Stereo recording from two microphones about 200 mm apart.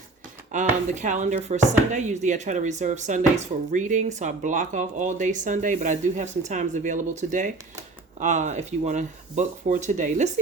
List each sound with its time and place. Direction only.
0.5 s speech: 40° right (ahead or behind)